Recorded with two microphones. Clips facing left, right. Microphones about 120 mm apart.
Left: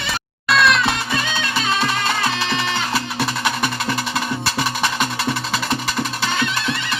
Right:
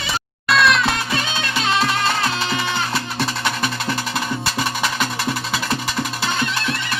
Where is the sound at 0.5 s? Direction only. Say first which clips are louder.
Even; centre (ahead or behind).